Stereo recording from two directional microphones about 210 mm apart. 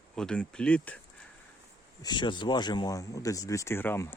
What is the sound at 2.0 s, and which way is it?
Speech, 20° left (ahead or behind).